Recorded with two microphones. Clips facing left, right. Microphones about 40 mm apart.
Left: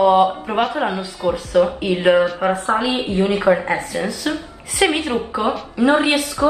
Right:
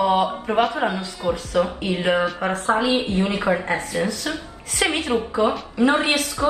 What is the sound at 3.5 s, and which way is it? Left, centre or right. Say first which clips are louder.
Speech: left 5 dB; centre.